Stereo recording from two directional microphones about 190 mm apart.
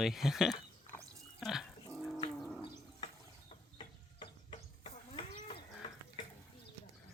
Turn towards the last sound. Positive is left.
turn(degrees=25)  # may be behind; listen again after turning